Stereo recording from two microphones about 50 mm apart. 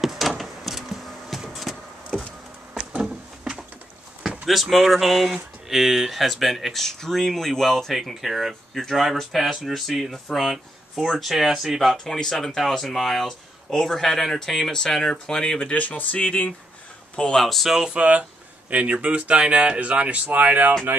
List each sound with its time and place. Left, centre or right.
0.0 s a sound: centre
4.5 s speech: centre
12.0 s speech: centre
15.7 s speech: left
17.2 s speech: centre
17.5 s speech: centre
17.9 s speech: right